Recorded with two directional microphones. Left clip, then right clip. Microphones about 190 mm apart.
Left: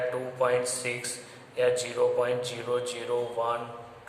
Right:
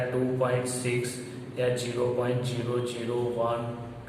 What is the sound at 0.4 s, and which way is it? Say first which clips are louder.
A man's voice: left 2 dB; 40° left (ahead or behind).